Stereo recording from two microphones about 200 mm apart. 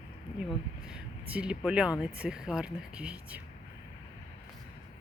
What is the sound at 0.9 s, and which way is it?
Speech, 5° right (ahead or behind).